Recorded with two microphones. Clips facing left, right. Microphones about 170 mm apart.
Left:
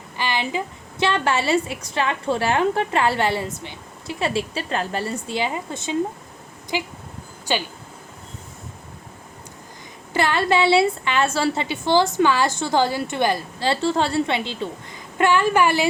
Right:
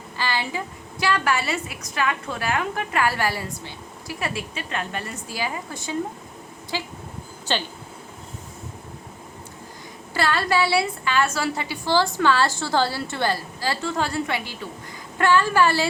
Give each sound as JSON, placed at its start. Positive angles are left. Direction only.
{"t": 0.2, "sound": "a woman's voice", "side_deg": 20}
{"t": 10.2, "sound": "a woman's voice", "side_deg": 20}